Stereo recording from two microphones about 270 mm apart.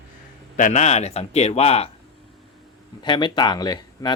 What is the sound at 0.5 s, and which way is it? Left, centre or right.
A man's voice, left.